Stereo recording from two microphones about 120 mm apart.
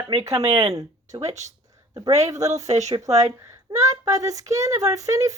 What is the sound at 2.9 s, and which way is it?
Speech, 70° right (ahead or behind).